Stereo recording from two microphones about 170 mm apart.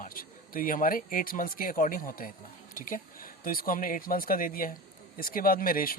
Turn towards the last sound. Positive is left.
turn(degrees=55)  # may be behind; listen again after turning